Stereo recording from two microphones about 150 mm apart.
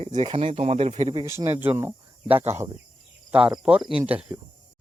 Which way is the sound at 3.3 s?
5° right (ahead or behind).